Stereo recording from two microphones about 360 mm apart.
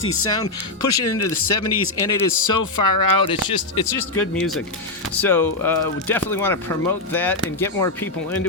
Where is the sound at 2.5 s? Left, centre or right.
Left.